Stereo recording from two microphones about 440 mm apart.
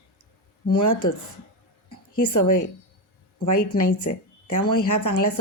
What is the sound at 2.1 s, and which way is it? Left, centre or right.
Speech, left.